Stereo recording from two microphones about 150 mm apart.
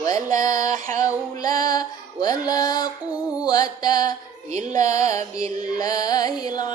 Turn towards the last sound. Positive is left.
turn(degrees=25)  # may be behind; listen again after turning